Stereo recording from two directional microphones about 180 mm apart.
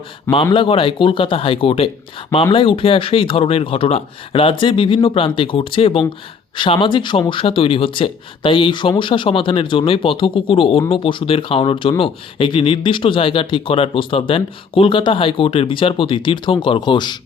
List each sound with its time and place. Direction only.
0.5 s speech: 30° left (ahead or behind)